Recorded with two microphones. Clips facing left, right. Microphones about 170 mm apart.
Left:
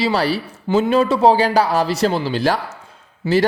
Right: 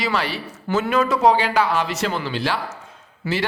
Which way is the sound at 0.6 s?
20° left (ahead or behind).